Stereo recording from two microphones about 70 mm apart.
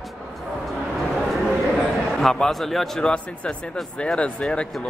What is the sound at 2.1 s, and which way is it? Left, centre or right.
Speech, centre.